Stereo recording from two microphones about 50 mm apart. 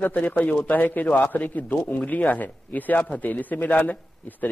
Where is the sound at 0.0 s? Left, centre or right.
Left.